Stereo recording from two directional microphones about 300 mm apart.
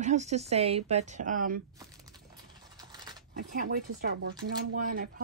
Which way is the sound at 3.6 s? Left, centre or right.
Right.